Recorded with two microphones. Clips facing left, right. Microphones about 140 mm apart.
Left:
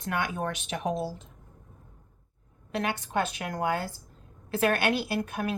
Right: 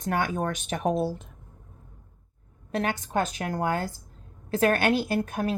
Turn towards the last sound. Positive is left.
turn(degrees=-40)  # may be behind; listen again after turning